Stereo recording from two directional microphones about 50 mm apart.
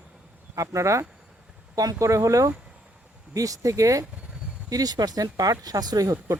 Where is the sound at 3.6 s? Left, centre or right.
Right.